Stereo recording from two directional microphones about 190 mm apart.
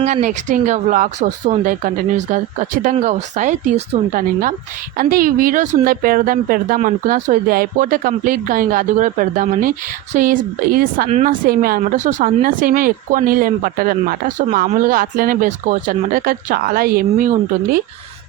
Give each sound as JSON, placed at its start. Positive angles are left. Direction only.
{"t": 0.0, "sound": "speech", "side_deg": -40}